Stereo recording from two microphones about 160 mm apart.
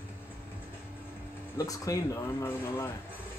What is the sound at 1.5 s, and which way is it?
Speech, 20° left (ahead or behind).